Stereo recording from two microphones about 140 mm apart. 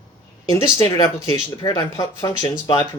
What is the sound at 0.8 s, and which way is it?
Speech, 30° left (ahead or behind).